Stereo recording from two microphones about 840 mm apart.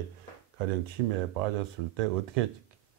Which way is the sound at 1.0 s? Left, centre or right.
Right.